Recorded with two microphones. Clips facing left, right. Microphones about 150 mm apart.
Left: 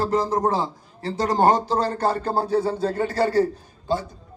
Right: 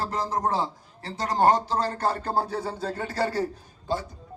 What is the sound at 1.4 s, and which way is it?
A man's voice, 25° left (ahead or behind).